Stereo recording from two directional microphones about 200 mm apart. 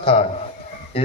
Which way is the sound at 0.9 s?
30° left (ahead or behind).